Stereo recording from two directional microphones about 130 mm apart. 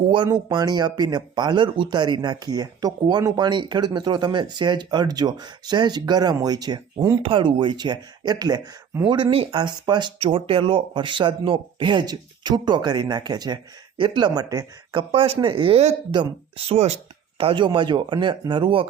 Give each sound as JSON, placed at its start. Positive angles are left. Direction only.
{"t": 0.3, "sound": "speech", "side_deg": -30}
{"t": 7.2, "sound": "speech", "side_deg": -40}
{"t": 10.2, "sound": "speech", "side_deg": -45}
{"t": 15.1, "sound": "speech", "side_deg": -45}
{"t": 16.6, "sound": "speech", "side_deg": -55}